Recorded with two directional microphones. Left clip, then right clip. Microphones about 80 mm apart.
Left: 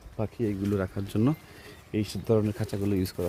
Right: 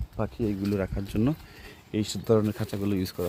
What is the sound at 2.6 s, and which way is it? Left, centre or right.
Speech, centre.